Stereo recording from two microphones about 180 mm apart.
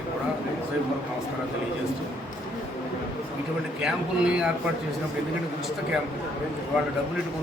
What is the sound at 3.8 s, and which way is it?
Speech, 5° right (ahead or behind).